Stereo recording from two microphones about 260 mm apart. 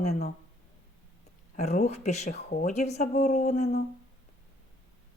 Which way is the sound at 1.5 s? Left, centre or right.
Left.